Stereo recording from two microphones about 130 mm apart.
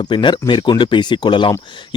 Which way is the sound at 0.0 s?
40° left (ahead or behind).